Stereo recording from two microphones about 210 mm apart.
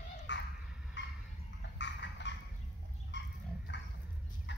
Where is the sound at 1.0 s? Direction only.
60° left (ahead or behind).